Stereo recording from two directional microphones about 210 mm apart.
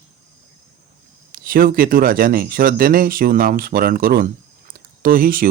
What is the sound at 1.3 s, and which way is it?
Speech, 45° right (ahead or behind).